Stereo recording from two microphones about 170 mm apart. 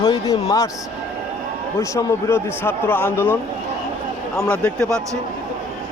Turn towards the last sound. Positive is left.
turn(degrees=5)  # may be behind; listen again after turning